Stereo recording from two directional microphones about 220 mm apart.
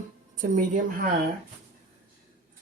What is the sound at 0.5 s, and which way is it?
Speech, 35° right (ahead or behind).